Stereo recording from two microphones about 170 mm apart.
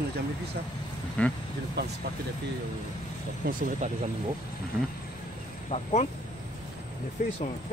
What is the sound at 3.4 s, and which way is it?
Speech, 60° right (ahead or behind).